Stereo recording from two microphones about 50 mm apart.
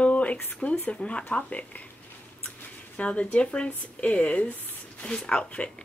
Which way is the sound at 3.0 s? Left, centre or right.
Left.